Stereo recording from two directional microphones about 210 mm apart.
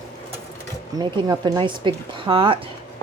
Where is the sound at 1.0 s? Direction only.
20° right (ahead or behind).